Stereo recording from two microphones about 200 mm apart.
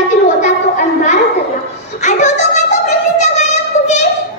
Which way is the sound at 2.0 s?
35° left (ahead or behind).